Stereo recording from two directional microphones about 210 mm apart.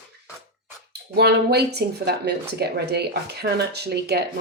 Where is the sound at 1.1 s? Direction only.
50° right (ahead or behind).